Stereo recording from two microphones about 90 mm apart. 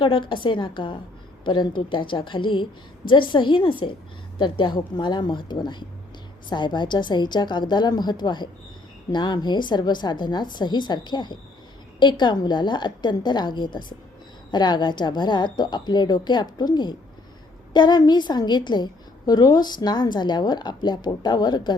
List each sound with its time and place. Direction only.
0.0 s a woman's voice: 65° left (ahead or behind)